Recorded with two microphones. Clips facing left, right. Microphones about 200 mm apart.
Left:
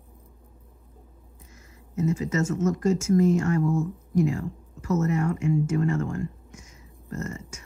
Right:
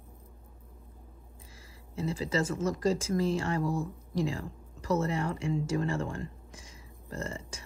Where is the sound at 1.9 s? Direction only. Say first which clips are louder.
Left 5 dB; 30° right (ahead or behind).